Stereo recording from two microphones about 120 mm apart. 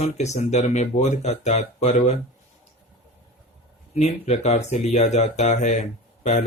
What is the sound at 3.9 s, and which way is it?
Speech, 70° left (ahead or behind).